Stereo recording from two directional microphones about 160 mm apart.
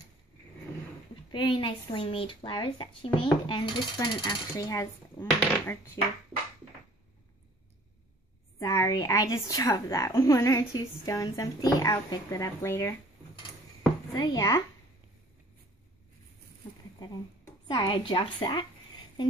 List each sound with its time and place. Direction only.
1.3 s speech: 30° left (ahead or behind)
8.5 s speech: 20° left (ahead or behind)
14.1 s speech: 25° left (ahead or behind)
17.6 s a woman's voice: 30° left (ahead or behind)